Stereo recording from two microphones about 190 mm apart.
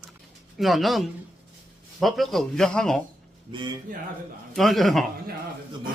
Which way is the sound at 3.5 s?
25° right (ahead or behind).